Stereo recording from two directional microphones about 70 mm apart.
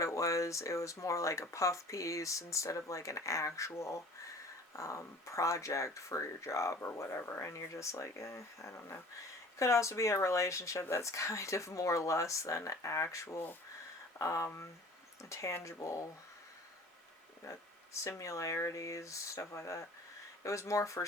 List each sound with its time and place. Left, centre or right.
0.0 s speech: left
18.2 s speech: left